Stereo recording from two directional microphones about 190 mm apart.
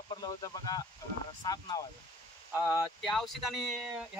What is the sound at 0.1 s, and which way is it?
Speech, 20° left (ahead or behind).